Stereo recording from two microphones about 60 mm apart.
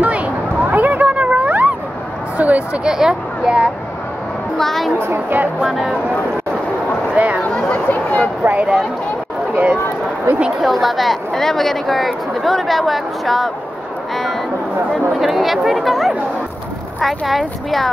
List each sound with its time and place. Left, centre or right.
0.0 s a sound: right
2.8 s speech: centre
4.6 s a woman's voice: centre
4.9 s speech: right
5.6 s a woman's voice: centre
7.2 s speech: right
7.5 s a sound: centre
8.4 s speech: right
10.6 s a woman's voice: centre
15.1 s a woman's voice: centre